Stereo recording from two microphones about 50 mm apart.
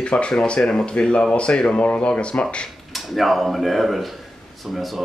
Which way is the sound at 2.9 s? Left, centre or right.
Centre.